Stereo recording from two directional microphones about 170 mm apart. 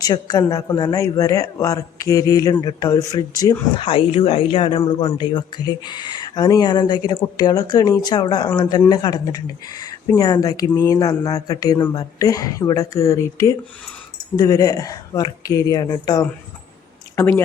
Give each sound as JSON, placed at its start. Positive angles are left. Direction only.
{"t": 0.0, "sound": "speech", "side_deg": 20}
{"t": 3.8, "sound": "speech", "side_deg": 35}